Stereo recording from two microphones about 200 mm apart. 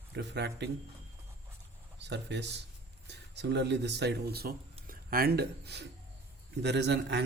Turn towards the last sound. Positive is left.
turn(degrees=-55)  # may be behind; listen again after turning